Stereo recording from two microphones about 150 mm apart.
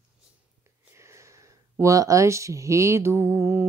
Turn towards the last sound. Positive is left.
turn(degrees=-15)  # may be behind; listen again after turning